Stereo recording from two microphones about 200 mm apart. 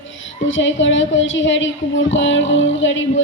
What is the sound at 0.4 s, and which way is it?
A woman's voice, 70° left (ahead or behind).